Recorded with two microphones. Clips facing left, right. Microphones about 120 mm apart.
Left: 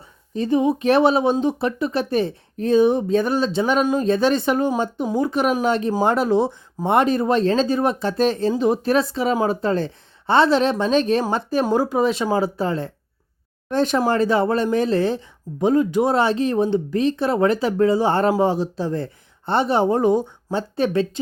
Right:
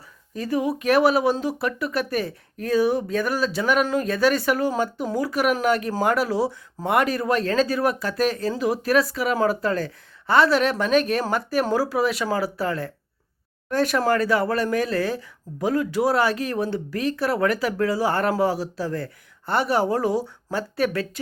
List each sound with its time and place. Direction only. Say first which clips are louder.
0.3 s speech: left 5 dB; 25° left (ahead or behind)